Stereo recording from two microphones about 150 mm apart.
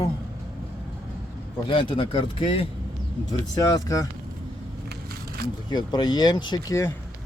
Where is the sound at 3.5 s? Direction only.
25° left (ahead or behind).